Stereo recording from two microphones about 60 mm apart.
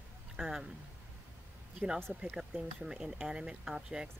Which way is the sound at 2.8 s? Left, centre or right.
Centre.